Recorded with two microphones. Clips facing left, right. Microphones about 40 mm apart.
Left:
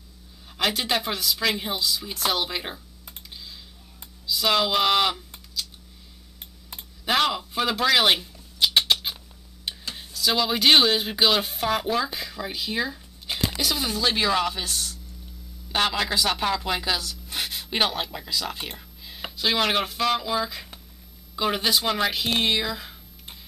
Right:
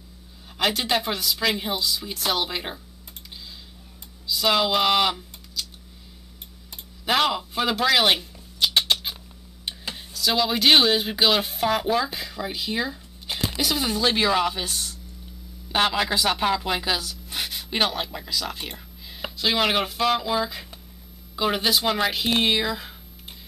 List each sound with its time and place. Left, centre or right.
0.6 s a woman's voice: centre
4.3 s speech: centre
7.1 s a sound: centre
9.9 s a woman's voice: centre